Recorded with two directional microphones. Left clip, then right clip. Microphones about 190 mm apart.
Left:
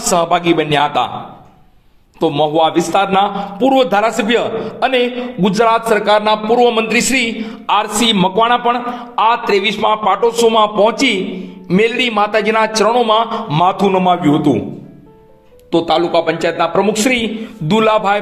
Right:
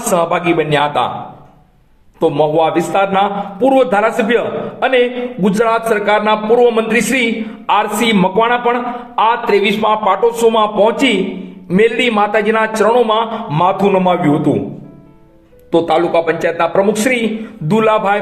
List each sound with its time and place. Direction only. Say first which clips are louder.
0.1 s a man's voice: left 1 dB; 40° left (ahead or behind)
2.1 s a man's voice: right 1 dB; 35° left (ahead or behind)
15.7 s a man's voice: right 1 dB; 30° left (ahead or behind)